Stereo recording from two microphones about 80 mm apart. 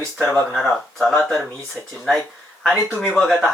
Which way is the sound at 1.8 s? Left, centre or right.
Centre.